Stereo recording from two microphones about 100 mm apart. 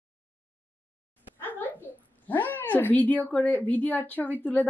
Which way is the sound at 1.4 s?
20° left (ahead or behind).